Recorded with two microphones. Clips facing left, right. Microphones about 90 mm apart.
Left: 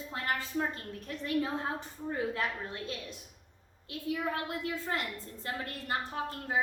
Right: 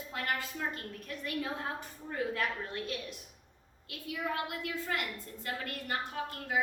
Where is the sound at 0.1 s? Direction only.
30° left (ahead or behind).